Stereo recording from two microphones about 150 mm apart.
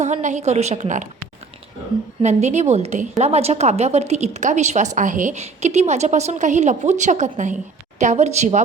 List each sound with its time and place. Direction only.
0.0 s a woman's voice: 55° right (ahead or behind)
2.2 s a woman's voice: 50° right (ahead or behind)